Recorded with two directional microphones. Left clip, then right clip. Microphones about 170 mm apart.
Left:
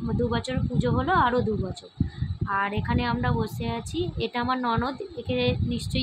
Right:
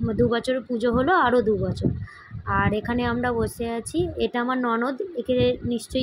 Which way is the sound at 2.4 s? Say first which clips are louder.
Right 3 dB; 15° right (ahead or behind).